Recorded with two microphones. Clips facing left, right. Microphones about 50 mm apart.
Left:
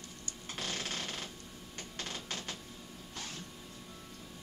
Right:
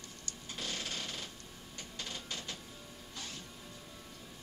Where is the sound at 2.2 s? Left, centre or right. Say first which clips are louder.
Left 2 dB; left.